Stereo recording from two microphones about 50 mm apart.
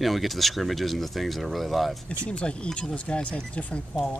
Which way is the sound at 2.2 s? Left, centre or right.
Left.